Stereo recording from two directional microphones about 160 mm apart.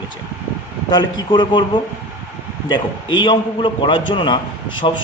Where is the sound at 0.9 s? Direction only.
25° left (ahead or behind).